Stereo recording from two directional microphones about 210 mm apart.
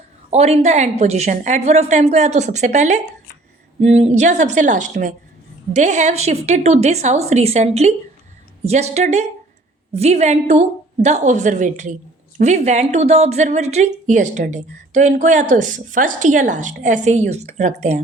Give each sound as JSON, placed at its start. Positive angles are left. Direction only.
{"t": 0.3, "sound": "a woman's voice", "side_deg": -30}